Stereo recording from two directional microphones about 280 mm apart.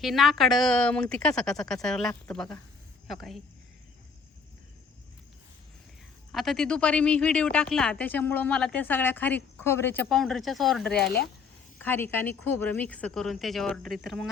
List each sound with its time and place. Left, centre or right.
0.0 s speech: centre
6.3 s speech: centre
10.9 s speech: left
11.8 s speech: centre